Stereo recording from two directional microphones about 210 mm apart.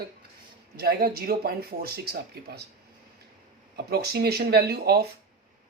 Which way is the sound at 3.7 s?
50° right (ahead or behind).